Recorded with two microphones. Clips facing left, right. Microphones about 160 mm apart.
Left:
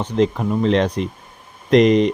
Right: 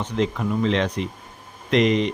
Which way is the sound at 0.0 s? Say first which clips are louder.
Left 5 dB; 35° left (ahead or behind).